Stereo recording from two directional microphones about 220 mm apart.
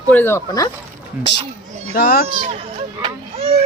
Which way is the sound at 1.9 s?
45° left (ahead or behind).